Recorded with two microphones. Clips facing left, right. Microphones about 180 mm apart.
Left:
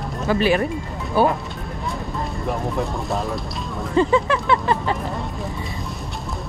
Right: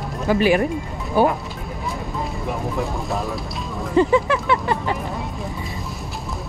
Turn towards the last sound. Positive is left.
turn(degrees=-15)  # may be behind; listen again after turning